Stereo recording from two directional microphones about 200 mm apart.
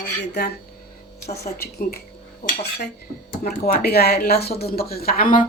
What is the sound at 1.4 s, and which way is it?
Speech, 15° left (ahead or behind).